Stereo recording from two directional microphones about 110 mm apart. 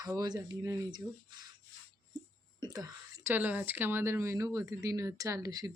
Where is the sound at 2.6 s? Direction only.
35° right (ahead or behind).